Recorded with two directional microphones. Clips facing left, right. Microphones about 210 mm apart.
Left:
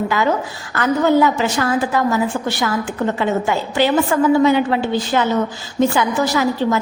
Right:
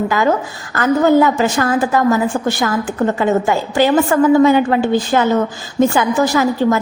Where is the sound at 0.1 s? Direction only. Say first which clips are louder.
Right 3 dB; 45° right (ahead or behind).